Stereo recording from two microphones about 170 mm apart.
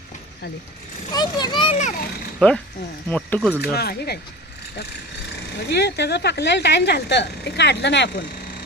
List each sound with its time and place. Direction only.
1.1 s a child's voice: 25° left (ahead or behind)
2.4 s speech: 5° left (ahead or behind)
3.6 s speech: 70° left (ahead or behind)
5.6 s speech: 75° left (ahead or behind)